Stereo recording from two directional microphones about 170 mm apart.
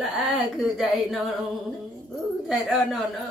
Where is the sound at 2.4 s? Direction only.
Centre (ahead or behind).